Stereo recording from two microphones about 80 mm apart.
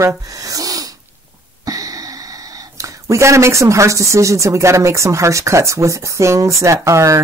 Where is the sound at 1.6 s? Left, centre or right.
Right.